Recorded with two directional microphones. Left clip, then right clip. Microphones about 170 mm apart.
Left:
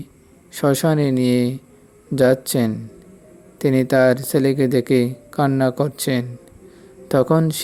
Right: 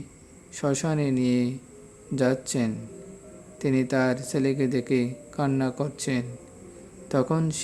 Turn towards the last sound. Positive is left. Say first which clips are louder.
# left 9 dB
turn(degrees=40)  # may be behind; listen again after turning